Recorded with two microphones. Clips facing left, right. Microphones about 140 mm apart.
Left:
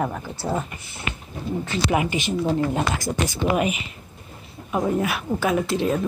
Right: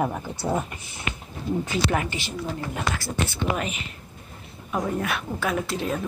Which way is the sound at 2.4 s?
25° left (ahead or behind).